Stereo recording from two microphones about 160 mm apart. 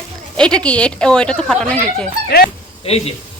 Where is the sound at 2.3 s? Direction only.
75° left (ahead or behind).